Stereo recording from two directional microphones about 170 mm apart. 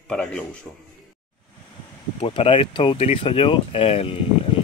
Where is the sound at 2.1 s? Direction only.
35° left (ahead or behind).